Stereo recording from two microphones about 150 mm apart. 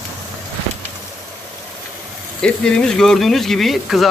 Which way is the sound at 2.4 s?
5° left (ahead or behind).